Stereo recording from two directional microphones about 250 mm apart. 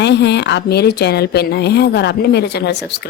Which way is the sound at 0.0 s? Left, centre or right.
Left.